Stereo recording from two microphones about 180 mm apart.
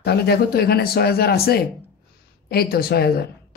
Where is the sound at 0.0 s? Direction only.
65° left (ahead or behind).